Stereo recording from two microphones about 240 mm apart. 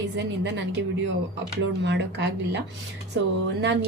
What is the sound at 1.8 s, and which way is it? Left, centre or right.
Speech, right.